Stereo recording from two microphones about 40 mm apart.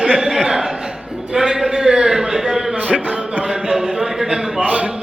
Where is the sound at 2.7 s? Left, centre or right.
Right.